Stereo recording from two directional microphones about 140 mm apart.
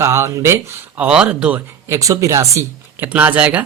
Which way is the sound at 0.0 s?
20° right (ahead or behind).